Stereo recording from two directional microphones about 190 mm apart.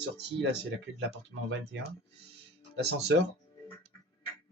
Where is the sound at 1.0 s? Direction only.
75° right (ahead or behind).